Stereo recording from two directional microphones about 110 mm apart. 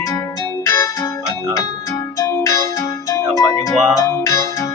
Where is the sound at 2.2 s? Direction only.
30° left (ahead or behind).